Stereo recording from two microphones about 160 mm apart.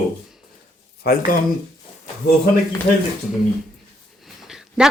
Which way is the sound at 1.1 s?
75° left (ahead or behind).